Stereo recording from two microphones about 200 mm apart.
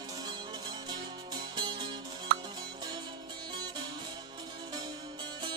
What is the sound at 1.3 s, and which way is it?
Music, 25° right (ahead or behind).